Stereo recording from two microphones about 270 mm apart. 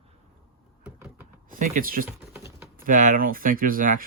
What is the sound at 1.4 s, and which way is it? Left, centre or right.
Speech, right.